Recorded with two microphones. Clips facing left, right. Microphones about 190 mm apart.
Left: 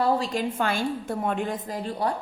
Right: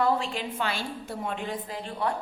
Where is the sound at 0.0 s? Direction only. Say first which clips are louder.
Left 3 dB; 40° left (ahead or behind).